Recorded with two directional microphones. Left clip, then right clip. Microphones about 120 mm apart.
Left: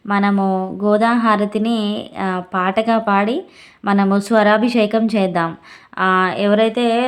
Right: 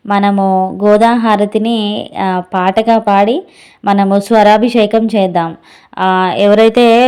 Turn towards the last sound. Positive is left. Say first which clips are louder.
# right 9 dB
turn(degrees=-60)  # may be behind; listen again after turning